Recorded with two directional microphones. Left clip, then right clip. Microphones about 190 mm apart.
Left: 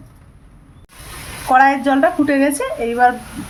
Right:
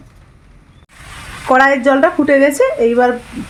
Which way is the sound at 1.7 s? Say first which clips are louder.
Right 3 dB; 40° right (ahead or behind).